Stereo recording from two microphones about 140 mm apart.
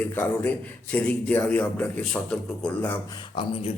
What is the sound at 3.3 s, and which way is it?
Speech, 45° left (ahead or behind).